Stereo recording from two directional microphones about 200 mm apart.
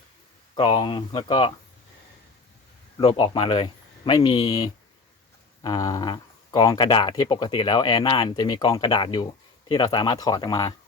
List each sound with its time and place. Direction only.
0.5 s speech: 25° left (ahead or behind)
3.0 s speech: 25° left (ahead or behind)